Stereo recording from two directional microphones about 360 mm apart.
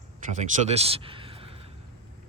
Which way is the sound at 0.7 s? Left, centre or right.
Centre.